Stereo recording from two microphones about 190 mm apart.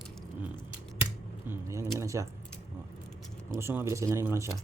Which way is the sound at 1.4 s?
15° right (ahead or behind).